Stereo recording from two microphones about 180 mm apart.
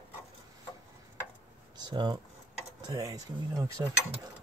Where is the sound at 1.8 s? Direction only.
25° right (ahead or behind).